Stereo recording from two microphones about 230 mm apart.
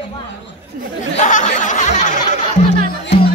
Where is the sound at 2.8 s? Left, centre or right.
Left.